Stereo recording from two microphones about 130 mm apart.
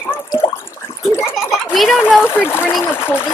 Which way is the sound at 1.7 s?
Centre (ahead or behind).